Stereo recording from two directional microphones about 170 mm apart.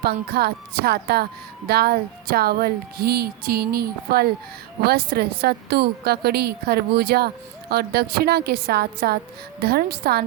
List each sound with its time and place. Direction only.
0.0 s a woman's voice: 65° right (ahead or behind)